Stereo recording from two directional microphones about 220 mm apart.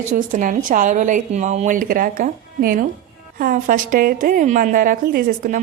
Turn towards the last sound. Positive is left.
turn(degrees=-40)  # may be behind; listen again after turning